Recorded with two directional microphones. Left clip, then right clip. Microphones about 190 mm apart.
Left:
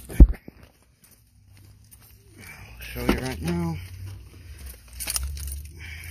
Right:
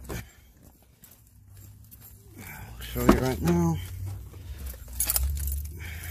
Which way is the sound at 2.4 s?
10° right (ahead or behind).